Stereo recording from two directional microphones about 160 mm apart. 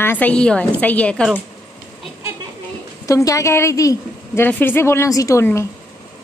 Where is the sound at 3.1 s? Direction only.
20° left (ahead or behind).